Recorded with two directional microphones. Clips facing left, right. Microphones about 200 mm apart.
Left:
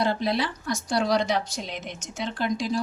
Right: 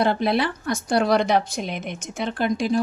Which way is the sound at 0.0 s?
60° right (ahead or behind).